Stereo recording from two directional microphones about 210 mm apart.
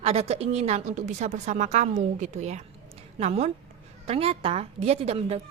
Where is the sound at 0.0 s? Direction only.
30° right (ahead or behind).